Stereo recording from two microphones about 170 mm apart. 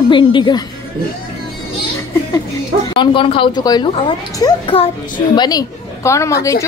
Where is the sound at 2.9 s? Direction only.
30° left (ahead or behind).